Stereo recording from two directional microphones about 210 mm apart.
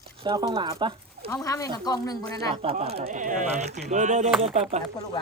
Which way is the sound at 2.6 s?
30° right (ahead or behind).